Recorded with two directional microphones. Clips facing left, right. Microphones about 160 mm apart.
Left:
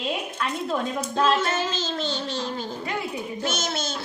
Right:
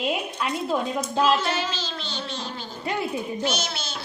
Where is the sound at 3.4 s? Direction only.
50° left (ahead or behind).